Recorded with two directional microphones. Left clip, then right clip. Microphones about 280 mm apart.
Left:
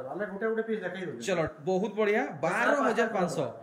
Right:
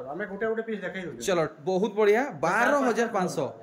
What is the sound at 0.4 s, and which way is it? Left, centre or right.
Speech, centre.